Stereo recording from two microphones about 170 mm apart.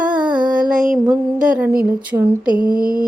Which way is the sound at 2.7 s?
55° right (ahead or behind).